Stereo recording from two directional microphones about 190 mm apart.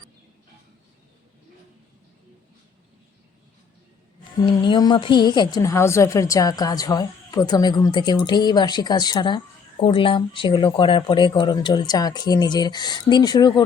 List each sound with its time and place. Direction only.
4.4 s a woman's voice: 25° left (ahead or behind)